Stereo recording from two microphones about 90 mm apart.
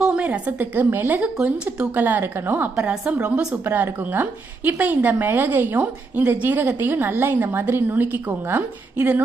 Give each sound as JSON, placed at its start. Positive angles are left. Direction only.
{"t": 0.0, "sound": "a sound", "side_deg": -10}
{"t": 0.3, "sound": "a woman's voice", "side_deg": -20}
{"t": 2.7, "sound": "a woman's voice", "side_deg": -10}
{"t": 3.3, "sound": "a woman's voice", "side_deg": -20}